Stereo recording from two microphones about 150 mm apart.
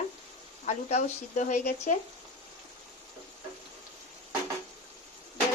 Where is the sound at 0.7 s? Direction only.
50° left (ahead or behind).